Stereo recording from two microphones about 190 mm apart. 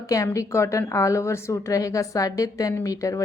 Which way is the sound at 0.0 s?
15° left (ahead or behind).